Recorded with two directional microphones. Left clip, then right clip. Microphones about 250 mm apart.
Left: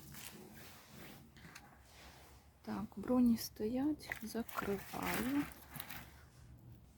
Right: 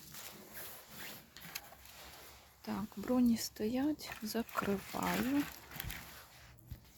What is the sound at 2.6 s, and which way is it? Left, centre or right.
Speech, centre.